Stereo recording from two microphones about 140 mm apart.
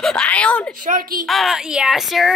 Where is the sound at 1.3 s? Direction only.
Centre (ahead or behind).